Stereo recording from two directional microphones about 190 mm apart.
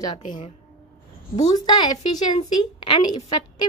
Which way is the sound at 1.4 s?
20° left (ahead or behind).